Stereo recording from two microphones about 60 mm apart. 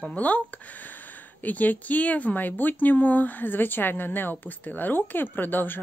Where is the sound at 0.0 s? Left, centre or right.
Left.